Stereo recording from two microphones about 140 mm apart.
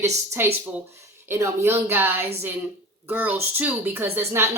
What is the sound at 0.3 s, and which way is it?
A woman's voice, 15° right (ahead or behind).